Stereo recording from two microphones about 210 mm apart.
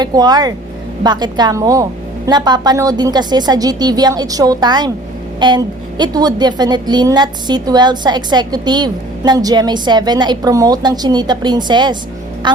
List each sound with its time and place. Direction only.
0.0 s a woman's voice: 20° right (ahead or behind)